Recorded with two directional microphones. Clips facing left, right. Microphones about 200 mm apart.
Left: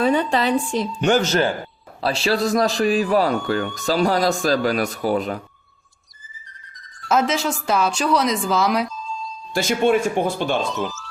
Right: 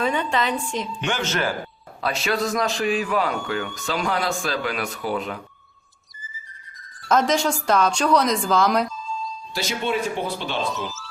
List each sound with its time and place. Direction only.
0.0 s a man's voice: 35° left (ahead or behind)
7.1 s a woman's voice: 5° left (ahead or behind)
9.6 s speech: 50° left (ahead or behind)
10.8 s music: centre (ahead or behind)